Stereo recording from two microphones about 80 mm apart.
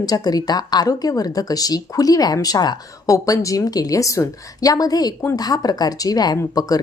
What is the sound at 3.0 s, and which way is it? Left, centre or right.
A woman's voice, left.